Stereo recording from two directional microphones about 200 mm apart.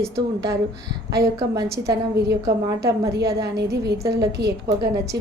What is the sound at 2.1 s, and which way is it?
Speech, 55° right (ahead or behind).